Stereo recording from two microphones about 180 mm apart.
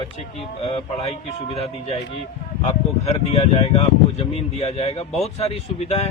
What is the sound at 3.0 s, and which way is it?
Speech, 35° left (ahead or behind).